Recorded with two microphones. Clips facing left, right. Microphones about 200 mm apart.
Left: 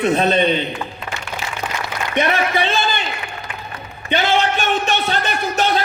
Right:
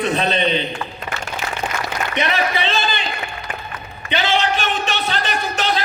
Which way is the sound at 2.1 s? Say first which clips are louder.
Left 4 dB; 50° left (ahead or behind).